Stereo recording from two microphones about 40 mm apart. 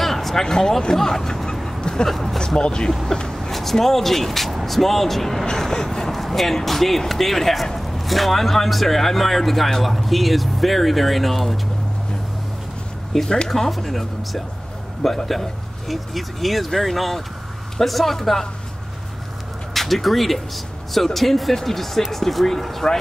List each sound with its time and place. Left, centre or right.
0.0 s music: centre
1.8 s a sound: centre
2.0 s speech: centre
2.4 s speech: centre
3.3 s speech: centre
13.2 s speech: centre
19.7 s speech: centre